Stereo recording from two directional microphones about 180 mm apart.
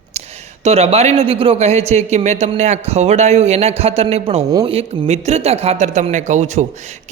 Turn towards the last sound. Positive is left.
turn(degrees=-40)  # may be behind; listen again after turning